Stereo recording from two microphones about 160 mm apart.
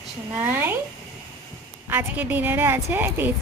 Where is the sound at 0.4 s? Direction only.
15° right (ahead or behind).